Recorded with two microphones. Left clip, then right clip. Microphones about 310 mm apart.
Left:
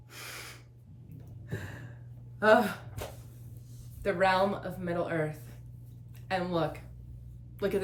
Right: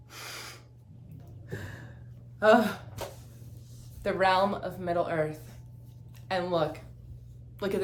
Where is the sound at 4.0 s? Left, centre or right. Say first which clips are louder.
Right 2 dB; centre.